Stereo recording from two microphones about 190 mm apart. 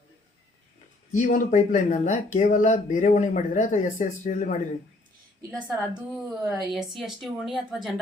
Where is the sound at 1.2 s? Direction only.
40° left (ahead or behind).